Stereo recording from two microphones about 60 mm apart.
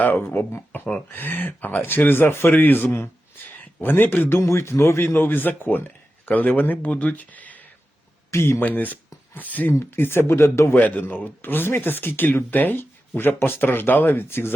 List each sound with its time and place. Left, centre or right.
0.0 s speech: left
4.4 s speech: left
8.3 s speech: left
8.6 s speech: left
9.7 s speech: left
10.8 s speech: left
11.4 s speech: left